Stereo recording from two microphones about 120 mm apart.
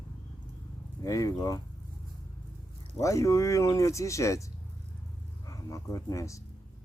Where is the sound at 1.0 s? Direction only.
30° left (ahead or behind).